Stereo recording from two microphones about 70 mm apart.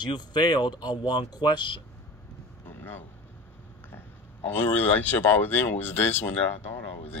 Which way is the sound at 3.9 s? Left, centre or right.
Left.